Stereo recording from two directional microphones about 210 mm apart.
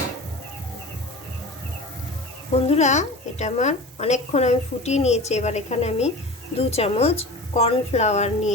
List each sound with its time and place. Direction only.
2.6 s a woman's voice: 30° left (ahead or behind)